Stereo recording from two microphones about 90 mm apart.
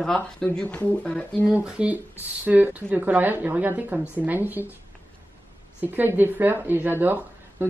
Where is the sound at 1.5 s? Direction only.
10° right (ahead or behind).